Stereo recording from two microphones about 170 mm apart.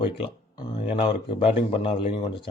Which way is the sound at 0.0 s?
30° left (ahead or behind).